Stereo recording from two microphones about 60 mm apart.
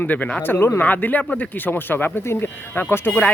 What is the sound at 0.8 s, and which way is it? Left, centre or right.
Speech, left.